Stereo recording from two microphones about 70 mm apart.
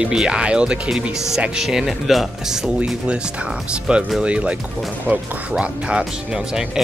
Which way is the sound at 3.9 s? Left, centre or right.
Centre.